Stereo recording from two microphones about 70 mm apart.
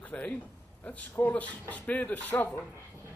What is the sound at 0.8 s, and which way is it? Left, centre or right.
A man's voice, left.